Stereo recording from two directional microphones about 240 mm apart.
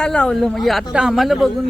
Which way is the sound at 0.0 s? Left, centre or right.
Centre.